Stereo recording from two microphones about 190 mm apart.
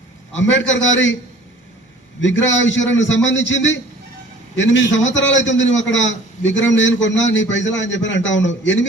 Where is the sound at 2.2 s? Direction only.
80° left.